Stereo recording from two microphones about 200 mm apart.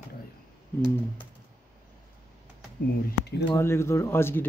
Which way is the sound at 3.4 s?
15° left (ahead or behind).